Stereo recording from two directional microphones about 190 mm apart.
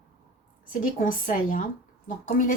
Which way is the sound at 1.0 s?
45° left (ahead or behind).